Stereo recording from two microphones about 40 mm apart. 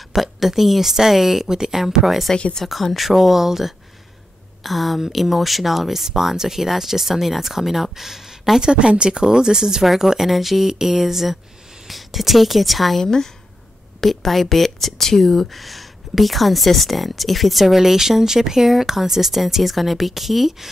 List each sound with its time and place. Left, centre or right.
0.1 s speech: centre
8.5 s speech: right; by 13.0 s centre
13.0 s speech: centre
14.0 s speech: centre